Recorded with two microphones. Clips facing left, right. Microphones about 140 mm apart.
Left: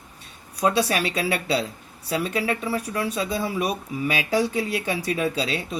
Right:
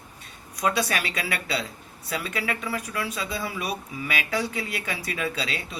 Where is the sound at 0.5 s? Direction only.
30° left (ahead or behind).